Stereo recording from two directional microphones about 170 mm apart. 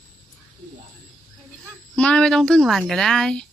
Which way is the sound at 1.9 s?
5° left (ahead or behind).